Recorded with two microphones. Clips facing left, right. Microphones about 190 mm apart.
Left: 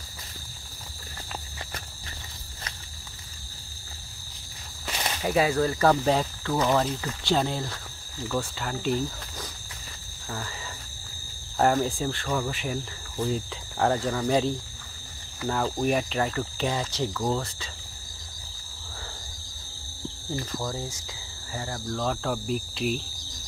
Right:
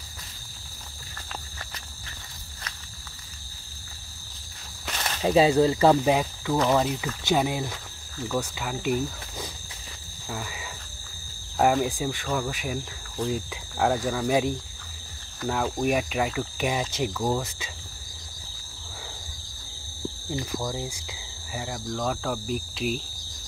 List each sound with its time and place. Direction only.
4.8 s walk: 10° left (ahead or behind)
5.2 s speech: 25° right (ahead or behind)
6.5 s cricket: centre (ahead or behind)
7.2 s speech: 10° right (ahead or behind)
10.3 s cricket: 10° right (ahead or behind)
11.5 s speech: 5° right (ahead or behind)
20.7 s speech: 15° right (ahead or behind)
21.7 s cricket: 5° left (ahead or behind)